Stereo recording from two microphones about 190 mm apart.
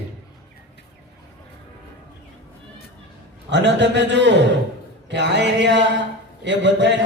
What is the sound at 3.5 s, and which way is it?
Speech, 70° right (ahead or behind).